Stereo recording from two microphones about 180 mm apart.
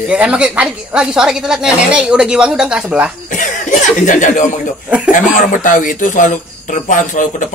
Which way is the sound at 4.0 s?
45° left (ahead or behind).